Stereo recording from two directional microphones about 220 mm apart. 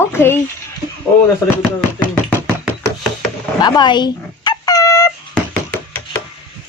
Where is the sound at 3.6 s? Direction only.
20° left (ahead or behind).